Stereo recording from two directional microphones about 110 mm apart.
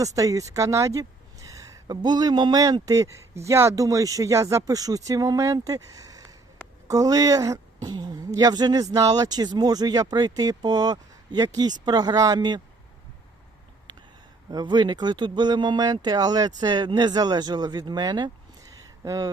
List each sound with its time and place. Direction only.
0.0 s speech: 30° right (ahead or behind)
14.5 s speech: 40° right (ahead or behind)